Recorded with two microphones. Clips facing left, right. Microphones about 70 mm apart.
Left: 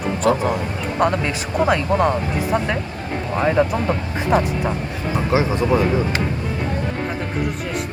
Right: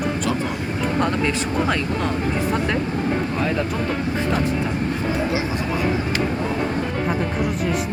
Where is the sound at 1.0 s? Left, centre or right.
Centre.